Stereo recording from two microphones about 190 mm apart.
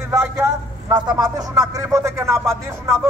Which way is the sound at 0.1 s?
15° right (ahead or behind).